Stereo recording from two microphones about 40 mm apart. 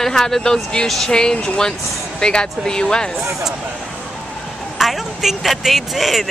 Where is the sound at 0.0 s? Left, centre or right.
Centre.